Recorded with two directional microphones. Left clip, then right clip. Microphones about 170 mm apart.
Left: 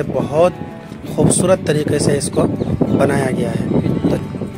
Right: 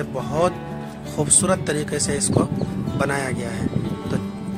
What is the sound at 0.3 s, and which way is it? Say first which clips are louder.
Speech: left 6 dB; 15° left (ahead or behind).